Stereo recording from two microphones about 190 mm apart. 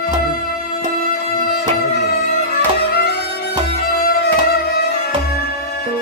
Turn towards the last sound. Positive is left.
turn(degrees=50)  # may be behind; listen again after turning